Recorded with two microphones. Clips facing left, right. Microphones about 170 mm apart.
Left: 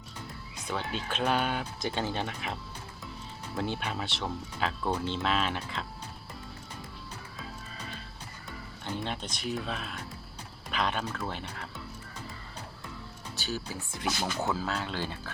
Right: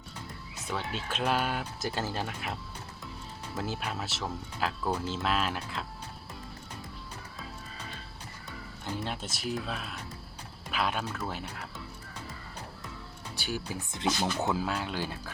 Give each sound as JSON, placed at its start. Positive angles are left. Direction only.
{"t": 0.7, "sound": "speech", "side_deg": -5}
{"t": 8.8, "sound": "speech", "side_deg": -5}
{"t": 13.3, "sound": "speech", "side_deg": -15}